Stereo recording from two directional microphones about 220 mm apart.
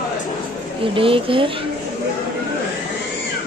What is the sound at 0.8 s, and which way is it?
Speech, 25° right (ahead or behind).